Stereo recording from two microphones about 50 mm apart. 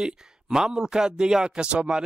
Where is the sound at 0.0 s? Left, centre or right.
Centre.